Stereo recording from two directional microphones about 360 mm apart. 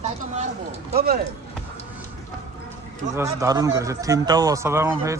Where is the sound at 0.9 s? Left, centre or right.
Right.